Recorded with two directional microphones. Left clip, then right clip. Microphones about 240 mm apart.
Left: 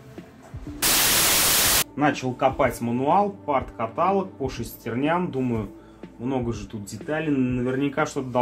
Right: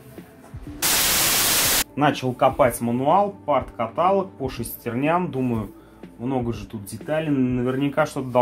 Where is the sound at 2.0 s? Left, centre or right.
Right.